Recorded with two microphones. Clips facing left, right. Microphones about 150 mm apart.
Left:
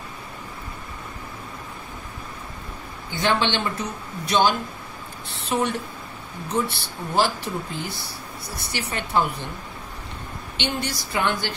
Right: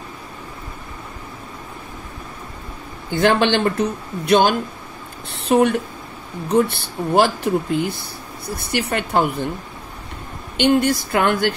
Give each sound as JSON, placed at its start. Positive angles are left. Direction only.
{"t": 3.2, "sound": "speech", "side_deg": -50}
{"t": 10.6, "sound": "speech", "side_deg": -50}